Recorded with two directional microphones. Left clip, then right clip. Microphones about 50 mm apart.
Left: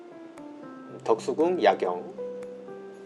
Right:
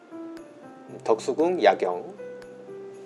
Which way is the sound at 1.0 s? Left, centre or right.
Right.